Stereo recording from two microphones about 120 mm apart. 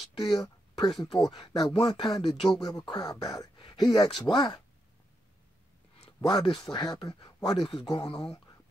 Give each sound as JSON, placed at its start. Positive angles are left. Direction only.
{"t": 0.3, "sound": "speech", "side_deg": 35}
{"t": 6.2, "sound": "speech", "side_deg": 40}
{"t": 8.0, "sound": "speech", "side_deg": 30}